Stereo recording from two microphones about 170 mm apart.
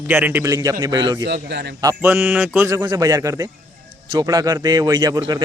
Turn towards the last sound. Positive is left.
turn(degrees=-20)  # may be behind; listen again after turning